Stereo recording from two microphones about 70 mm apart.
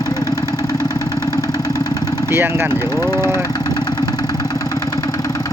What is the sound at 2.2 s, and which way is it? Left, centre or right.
Speech, right.